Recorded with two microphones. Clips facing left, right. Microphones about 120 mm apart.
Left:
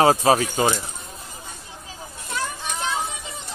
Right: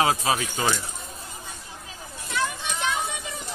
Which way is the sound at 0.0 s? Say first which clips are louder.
Left 6 dB; 35° left (ahead or behind).